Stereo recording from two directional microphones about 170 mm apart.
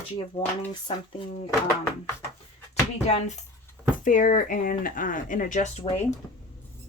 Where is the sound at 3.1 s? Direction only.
40° left (ahead or behind).